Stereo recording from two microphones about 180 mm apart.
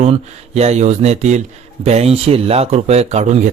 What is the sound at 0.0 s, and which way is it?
Speech, 35° right (ahead or behind).